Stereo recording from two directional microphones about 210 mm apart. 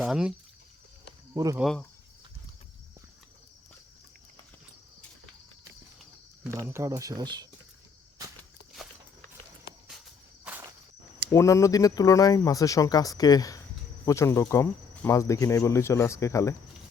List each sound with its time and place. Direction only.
0.0 s speech: 5° right (ahead or behind)
1.3 s speech: 15° right (ahead or behind)
1.5 s speech: centre (ahead or behind)
6.4 s speech: 10° right (ahead or behind)
11.3 s speech: 15° left (ahead or behind)